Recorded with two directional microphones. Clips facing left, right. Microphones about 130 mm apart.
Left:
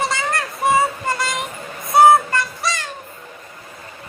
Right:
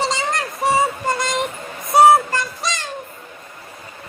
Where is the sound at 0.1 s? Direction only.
20° right (ahead or behind).